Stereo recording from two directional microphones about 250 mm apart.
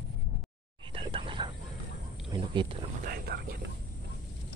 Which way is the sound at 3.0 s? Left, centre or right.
Right.